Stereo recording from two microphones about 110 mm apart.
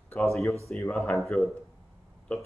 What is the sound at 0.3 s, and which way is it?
Speech, 25° left (ahead or behind).